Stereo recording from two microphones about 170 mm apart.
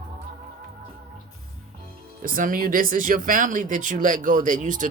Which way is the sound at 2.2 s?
55° right (ahead or behind).